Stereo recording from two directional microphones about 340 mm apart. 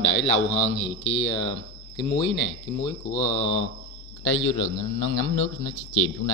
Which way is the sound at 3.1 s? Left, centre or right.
Centre.